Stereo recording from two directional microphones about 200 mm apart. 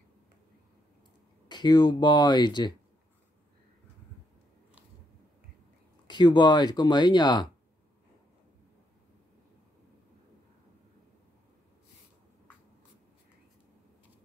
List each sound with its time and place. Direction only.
1.5 s speech: 20° left (ahead or behind)
6.0 s speech: 20° left (ahead or behind)